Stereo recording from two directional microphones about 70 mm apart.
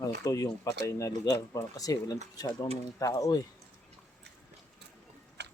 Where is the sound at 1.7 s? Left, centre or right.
Left.